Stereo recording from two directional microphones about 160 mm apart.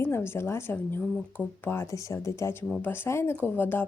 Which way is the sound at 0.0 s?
15° left (ahead or behind).